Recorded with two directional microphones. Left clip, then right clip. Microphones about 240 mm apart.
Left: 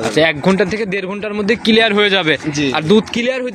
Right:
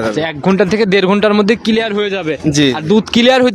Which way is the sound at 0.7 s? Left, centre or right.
Right.